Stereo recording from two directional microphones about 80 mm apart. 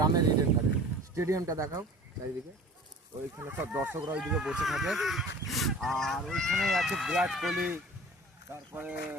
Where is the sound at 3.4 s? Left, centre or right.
Right.